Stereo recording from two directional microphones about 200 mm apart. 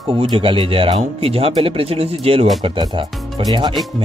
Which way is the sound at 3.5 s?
20° right (ahead or behind).